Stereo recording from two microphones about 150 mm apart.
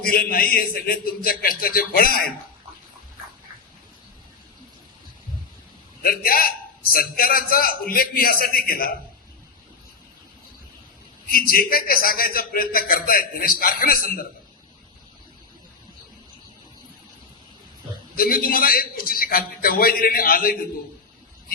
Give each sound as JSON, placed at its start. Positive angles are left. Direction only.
{"t": 0.0, "sound": "a man's voice", "side_deg": 75}
{"t": 6.0, "sound": "a man's voice", "side_deg": 75}
{"t": 11.3, "sound": "a man's voice", "side_deg": 75}
{"t": 18.1, "sound": "a man's voice", "side_deg": 75}